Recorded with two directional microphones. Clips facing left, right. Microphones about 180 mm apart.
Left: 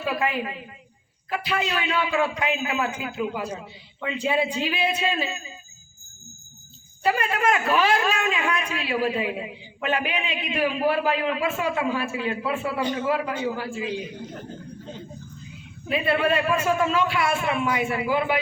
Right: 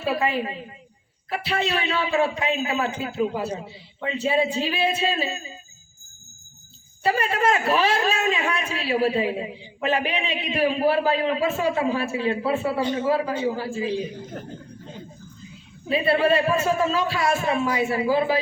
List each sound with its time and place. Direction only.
0.0 s a woman's voice: 30° right (ahead or behind)
7.0 s a woman's voice: 35° right (ahead or behind)
15.9 s a woman's voice: 30° right (ahead or behind)